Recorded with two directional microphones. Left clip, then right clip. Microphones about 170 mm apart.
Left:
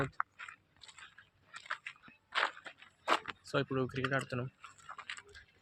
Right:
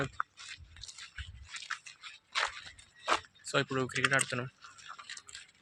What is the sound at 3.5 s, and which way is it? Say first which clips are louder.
Speech: right 4 dB; 15° right (ahead or behind).